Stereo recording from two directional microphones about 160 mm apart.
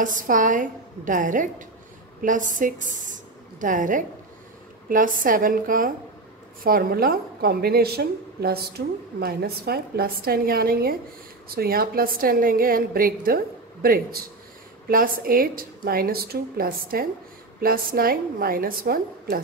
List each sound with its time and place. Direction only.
0.0 s a woman's voice: 55° right (ahead or behind)